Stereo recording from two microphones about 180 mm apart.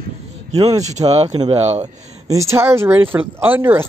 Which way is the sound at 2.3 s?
15° right (ahead or behind).